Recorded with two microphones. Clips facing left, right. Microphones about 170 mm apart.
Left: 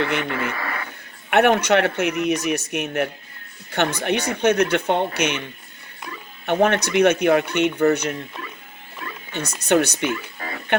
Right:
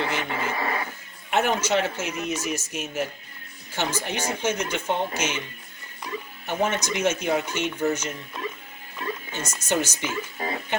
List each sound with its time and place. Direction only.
0.0 s a man's voice: 60° left (ahead or behind)
0.5 s speech: 20° right (ahead or behind)
1.3 s a man's voice: 65° left (ahead or behind)
6.4 s a man's voice: 65° left (ahead or behind)
9.6 s a man's voice: 65° left (ahead or behind)
10.4 s a sound: 20° right (ahead or behind)